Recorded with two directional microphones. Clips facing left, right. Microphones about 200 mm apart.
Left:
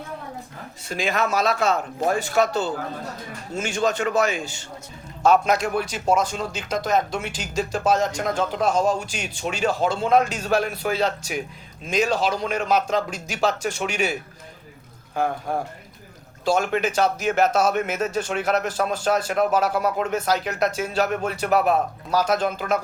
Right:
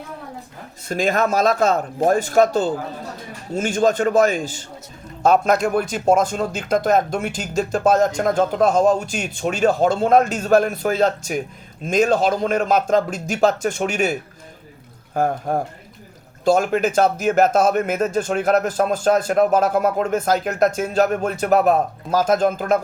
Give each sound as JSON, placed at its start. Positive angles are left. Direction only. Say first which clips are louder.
{"t": 0.9, "sound": "speech", "louder": "right 4 dB", "side_deg": -45}
{"t": 3.6, "sound": "speech", "louder": "right 5 dB", "side_deg": -45}